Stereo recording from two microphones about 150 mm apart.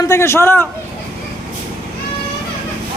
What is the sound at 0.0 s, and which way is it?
Speech, 20° left (ahead or behind).